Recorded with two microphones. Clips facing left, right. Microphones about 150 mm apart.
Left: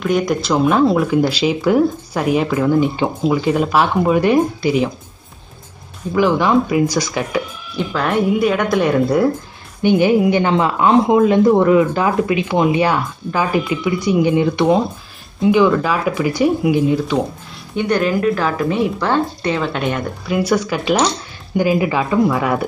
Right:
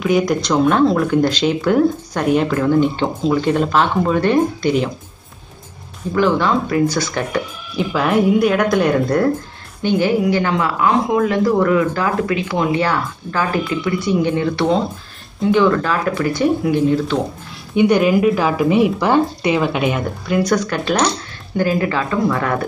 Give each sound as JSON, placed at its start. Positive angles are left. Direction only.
{"t": 0.0, "sound": "speech", "side_deg": 0}
{"t": 6.1, "sound": "speech", "side_deg": 10}
{"t": 9.8, "sound": "speech", "side_deg": 15}
{"t": 17.7, "sound": "speech", "side_deg": -10}